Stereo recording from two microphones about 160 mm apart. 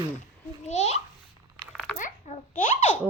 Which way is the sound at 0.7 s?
45° left (ahead or behind).